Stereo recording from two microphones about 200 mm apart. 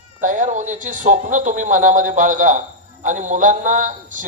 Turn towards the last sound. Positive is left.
turn(degrees=-40)  # may be behind; listen again after turning